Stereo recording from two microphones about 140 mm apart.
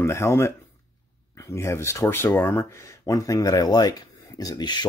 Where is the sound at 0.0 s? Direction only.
20° left (ahead or behind).